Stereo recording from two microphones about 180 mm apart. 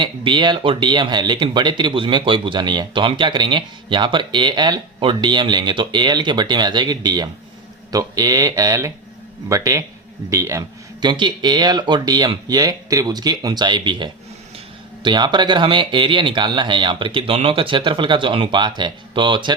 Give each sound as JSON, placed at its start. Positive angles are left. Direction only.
{"t": 0.0, "sound": "speech", "side_deg": -25}